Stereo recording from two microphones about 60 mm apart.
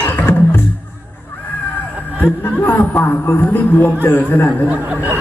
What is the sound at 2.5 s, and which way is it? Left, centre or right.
A man's voice, left.